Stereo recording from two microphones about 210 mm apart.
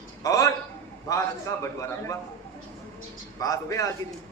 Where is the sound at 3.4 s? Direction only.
15° left (ahead or behind).